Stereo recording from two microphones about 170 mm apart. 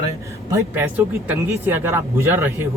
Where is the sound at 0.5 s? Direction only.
10° right (ahead or behind).